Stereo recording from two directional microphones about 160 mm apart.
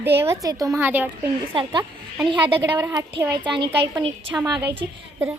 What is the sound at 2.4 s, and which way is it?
A child's voice, 10° right (ahead or behind).